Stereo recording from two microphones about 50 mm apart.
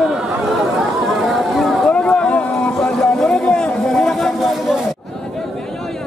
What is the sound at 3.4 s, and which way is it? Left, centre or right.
Chatter, centre.